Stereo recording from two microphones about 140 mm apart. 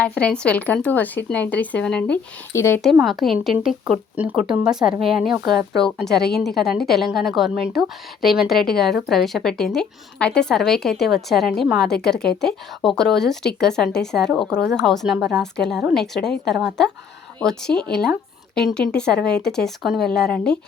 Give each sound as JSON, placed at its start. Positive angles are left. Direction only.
{"t": 0.0, "sound": "speech", "side_deg": 10}
{"t": 2.9, "sound": "a woman's voice", "side_deg": 0}